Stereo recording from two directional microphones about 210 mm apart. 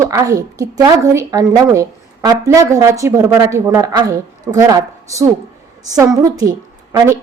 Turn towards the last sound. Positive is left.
turn(degrees=-15)  # may be behind; listen again after turning